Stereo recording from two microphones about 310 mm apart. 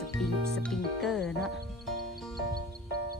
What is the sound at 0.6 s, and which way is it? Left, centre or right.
Speech, centre.